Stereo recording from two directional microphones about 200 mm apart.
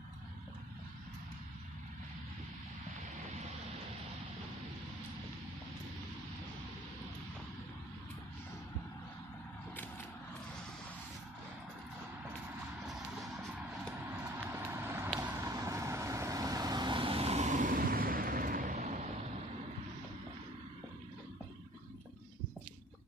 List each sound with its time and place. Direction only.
12.9 s music: centre (ahead or behind)
14.6 s vehicle: 10° right (ahead or behind); by 18.9 s 40° right (ahead or behind)